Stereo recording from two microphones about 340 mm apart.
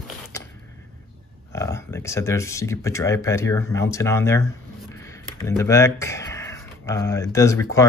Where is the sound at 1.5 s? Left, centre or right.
Centre.